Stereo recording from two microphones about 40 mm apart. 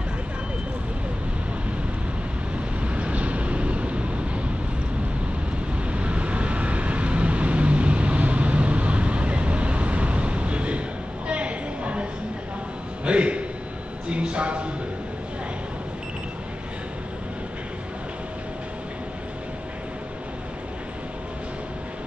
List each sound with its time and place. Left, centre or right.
2.8 s vehicle: right
5.9 s vehicle: right
11.2 s a sound: right